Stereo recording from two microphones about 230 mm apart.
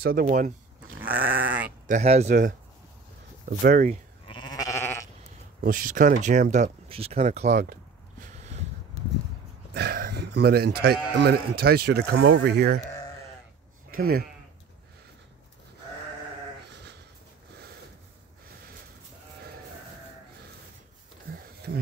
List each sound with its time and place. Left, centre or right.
0.0 s speech: right
0.9 s goat: centre
1.9 s speech: right
4.3 s sheep: centre
5.6 s speech: right
9.8 s speech: right
13.8 s speech: right
21.3 s a sound: right